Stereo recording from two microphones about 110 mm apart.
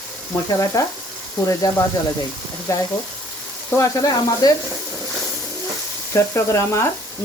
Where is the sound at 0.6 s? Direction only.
30° left (ahead or behind).